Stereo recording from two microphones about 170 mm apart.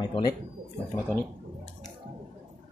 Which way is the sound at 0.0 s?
25° left (ahead or behind).